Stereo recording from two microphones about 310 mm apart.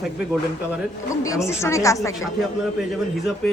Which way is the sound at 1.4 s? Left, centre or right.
Centre.